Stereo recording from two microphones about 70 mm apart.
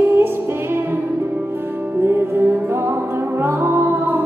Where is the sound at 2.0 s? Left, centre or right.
Right.